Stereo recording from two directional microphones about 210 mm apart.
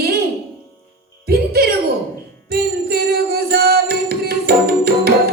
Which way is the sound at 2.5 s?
50° right (ahead or behind).